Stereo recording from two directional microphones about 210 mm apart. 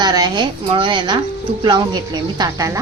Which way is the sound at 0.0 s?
20° right (ahead or behind).